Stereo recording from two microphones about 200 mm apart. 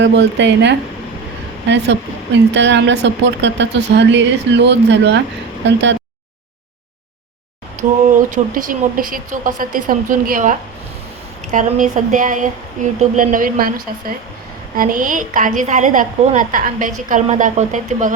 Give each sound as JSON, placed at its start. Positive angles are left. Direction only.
{"t": 0.0, "sound": "speech", "side_deg": -60}
{"t": 8.5, "sound": "a woman's voice", "side_deg": -40}
{"t": 11.5, "sound": "a woman's voice", "side_deg": -40}